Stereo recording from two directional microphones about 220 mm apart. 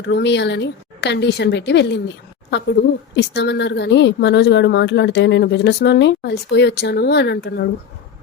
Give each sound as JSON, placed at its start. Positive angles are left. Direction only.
{"t": 0.0, "sound": "speech", "side_deg": 55}